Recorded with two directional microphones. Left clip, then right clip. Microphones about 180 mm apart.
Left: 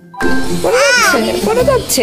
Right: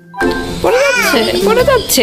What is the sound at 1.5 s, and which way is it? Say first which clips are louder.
Speech: right 1 dB; 10° right (ahead or behind).